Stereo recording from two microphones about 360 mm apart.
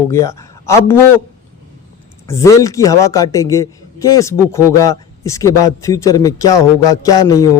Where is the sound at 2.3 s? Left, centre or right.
Centre.